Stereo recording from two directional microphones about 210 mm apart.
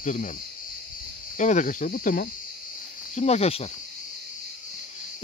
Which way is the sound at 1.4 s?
35° left (ahead or behind).